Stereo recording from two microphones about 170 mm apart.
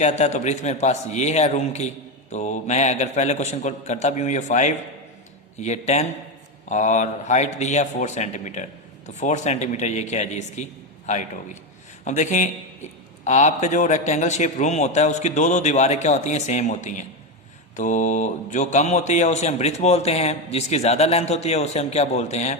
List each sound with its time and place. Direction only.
0.0 s a man's voice: 45° left (ahead or behind)